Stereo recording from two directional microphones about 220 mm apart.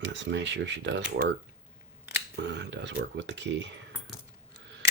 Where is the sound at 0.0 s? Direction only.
55° right (ahead or behind).